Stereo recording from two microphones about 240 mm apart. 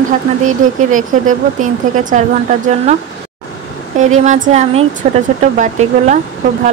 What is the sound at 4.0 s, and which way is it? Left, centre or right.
Speech, right.